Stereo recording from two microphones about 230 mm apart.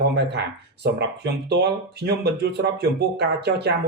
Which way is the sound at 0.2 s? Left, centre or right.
Right.